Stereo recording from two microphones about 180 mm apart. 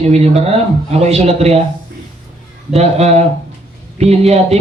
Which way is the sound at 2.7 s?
35° right (ahead or behind).